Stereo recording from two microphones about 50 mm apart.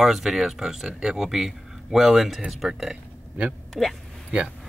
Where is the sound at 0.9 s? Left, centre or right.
Centre.